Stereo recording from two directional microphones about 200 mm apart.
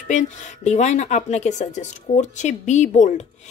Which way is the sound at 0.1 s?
35° left (ahead or behind).